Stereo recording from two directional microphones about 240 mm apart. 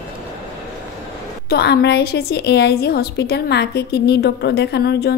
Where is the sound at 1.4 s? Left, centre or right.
Left.